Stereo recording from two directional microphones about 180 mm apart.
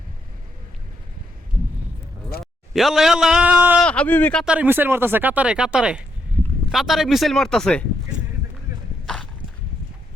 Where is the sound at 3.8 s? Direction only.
5° left (ahead or behind).